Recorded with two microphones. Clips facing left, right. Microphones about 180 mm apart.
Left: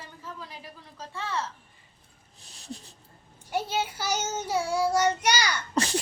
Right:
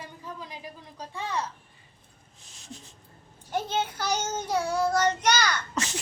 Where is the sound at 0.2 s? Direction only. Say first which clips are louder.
Even; 15° right (ahead or behind).